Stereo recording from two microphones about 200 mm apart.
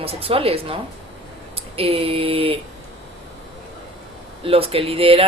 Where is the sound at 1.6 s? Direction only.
30° right (ahead or behind).